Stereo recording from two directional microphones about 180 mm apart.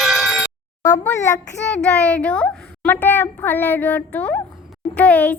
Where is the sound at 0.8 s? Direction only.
15° left (ahead or behind).